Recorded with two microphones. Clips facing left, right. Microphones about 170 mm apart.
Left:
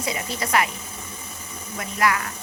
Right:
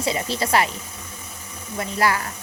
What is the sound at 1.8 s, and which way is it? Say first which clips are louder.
Speech: right 1 dB; 30° right (ahead or behind).